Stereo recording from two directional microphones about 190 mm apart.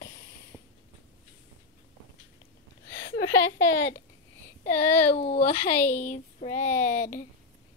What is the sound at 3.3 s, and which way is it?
Speech, 15° left (ahead or behind).